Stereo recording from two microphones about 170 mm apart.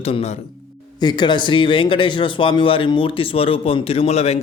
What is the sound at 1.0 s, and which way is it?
Speech, 25° left (ahead or behind).